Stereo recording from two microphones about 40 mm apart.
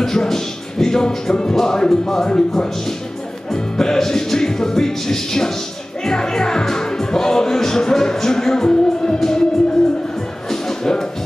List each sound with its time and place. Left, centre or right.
0.0 s speech: centre
3.5 s speech: centre
10.5 s music: centre